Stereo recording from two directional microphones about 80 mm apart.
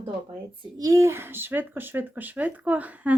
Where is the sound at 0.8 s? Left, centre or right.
Right; by 3.2 s centre.